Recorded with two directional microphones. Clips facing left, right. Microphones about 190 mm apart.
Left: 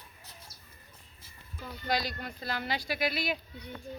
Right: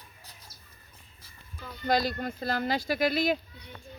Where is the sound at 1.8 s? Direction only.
50° right (ahead or behind).